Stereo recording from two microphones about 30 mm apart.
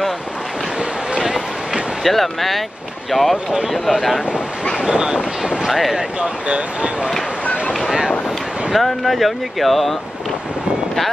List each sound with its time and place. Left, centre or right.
2.0 s speech: centre
4.8 s vehicle: right
5.7 s speech: centre
6.2 s speech: right
8.7 s speech: centre